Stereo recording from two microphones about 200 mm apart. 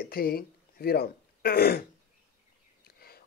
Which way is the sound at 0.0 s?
50° left (ahead or behind).